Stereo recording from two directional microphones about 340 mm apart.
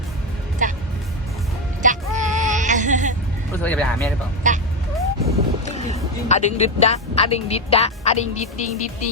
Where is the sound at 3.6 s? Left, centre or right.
Centre.